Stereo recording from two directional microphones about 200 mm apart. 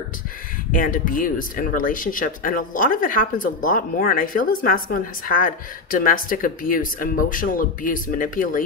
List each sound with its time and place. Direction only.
0.7 s speech: 45° left (ahead or behind)